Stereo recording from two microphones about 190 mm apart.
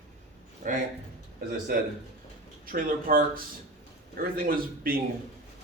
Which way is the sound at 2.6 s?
50° right (ahead or behind).